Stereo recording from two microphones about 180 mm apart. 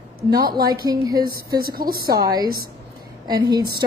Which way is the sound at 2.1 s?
20° right (ahead or behind).